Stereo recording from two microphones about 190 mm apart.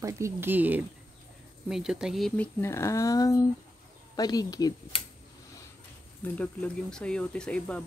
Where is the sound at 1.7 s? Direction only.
5° right (ahead or behind).